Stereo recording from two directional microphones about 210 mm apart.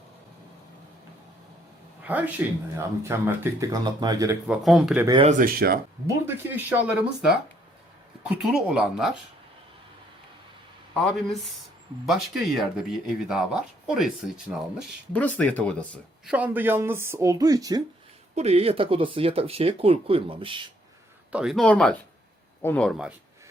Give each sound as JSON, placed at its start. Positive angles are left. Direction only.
{"t": 2.0, "sound": "speech", "side_deg": -5}
{"t": 4.4, "sound": "speech", "side_deg": 0}
{"t": 5.0, "sound": "speech", "side_deg": -25}
{"t": 5.3, "sound": "speech", "side_deg": -40}
{"t": 6.2, "sound": "speech", "side_deg": -10}
{"t": 8.4, "sound": "speech", "side_deg": -5}
{"t": 10.9, "sound": "speech", "side_deg": 0}
{"t": 16.3, "sound": "speech", "side_deg": -10}
{"t": 18.3, "sound": "speech", "side_deg": -30}
{"t": 21.3, "sound": "speech", "side_deg": 0}